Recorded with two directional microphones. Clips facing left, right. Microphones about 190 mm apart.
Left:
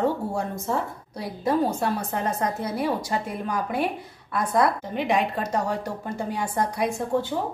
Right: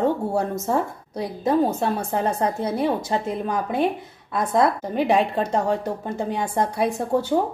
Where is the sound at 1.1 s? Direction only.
20° right (ahead or behind).